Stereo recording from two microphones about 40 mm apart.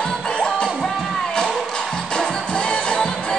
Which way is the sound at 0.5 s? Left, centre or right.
Centre.